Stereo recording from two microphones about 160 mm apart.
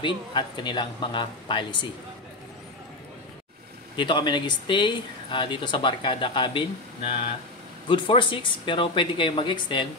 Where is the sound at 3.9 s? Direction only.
30° left (ahead or behind).